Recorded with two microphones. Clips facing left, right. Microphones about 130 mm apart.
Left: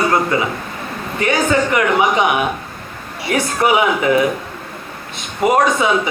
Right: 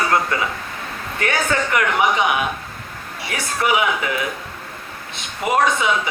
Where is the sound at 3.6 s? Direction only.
35° left (ahead or behind).